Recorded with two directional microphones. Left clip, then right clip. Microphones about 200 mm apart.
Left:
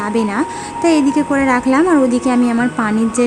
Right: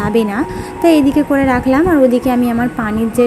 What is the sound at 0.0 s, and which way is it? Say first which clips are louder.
A woman's voice: right 2 dB; 10° right (ahead or behind).